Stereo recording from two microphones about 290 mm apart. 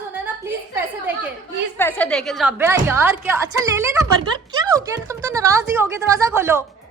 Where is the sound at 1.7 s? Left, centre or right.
Centre.